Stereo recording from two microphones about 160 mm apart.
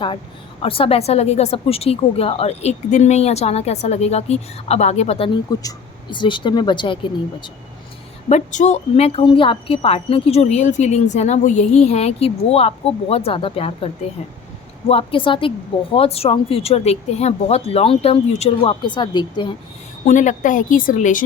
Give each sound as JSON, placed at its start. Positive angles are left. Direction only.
{"t": 0.6, "sound": "a woman's voice", "side_deg": 35}
{"t": 8.3, "sound": "a woman's voice", "side_deg": 50}
{"t": 20.1, "sound": "a woman's voice", "side_deg": 50}